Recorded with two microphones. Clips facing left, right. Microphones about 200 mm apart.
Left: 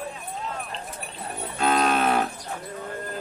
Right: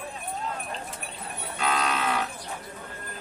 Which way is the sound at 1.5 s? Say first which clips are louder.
Left 6 dB; 50° left (ahead or behind).